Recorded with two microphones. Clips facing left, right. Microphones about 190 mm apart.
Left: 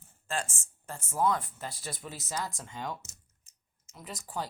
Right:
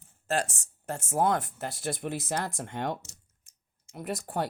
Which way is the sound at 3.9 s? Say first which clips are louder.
Right 10 dB; 60° right (ahead or behind).